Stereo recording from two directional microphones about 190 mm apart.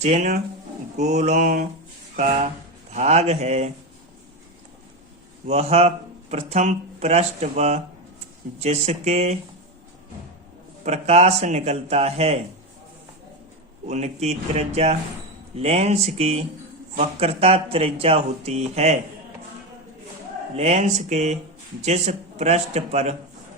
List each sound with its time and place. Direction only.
0.0 s speech: 35° right (ahead or behind)
5.5 s speech: 35° right (ahead or behind)
10.8 s speech: 35° right (ahead or behind)
13.8 s speech: 35° right (ahead or behind)
20.6 s speech: 35° right (ahead or behind)